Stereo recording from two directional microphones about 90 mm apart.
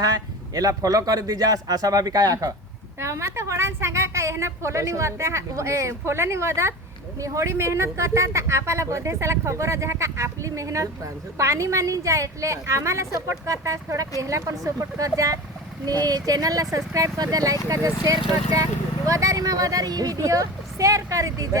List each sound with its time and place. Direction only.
0.0 s a man's voice: 40° right (ahead or behind)